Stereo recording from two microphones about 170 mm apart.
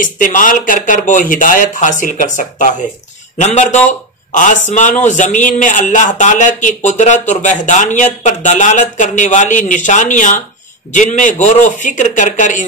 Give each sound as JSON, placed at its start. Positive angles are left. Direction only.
{"t": 0.0, "sound": "a man's voice", "side_deg": 50}